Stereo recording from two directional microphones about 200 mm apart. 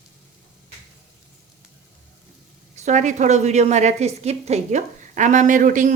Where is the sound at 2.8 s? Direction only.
35° right (ahead or behind).